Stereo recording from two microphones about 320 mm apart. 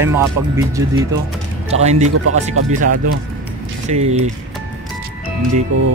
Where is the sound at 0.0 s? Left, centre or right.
Centre.